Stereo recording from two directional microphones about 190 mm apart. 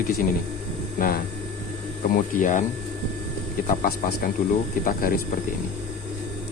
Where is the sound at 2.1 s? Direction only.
45° left (ahead or behind).